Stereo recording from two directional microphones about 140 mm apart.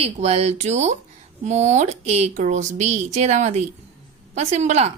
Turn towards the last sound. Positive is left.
turn(degrees=-55)  # may be behind; listen again after turning